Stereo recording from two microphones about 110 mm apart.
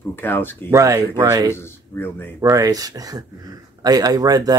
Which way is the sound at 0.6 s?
30° right (ahead or behind).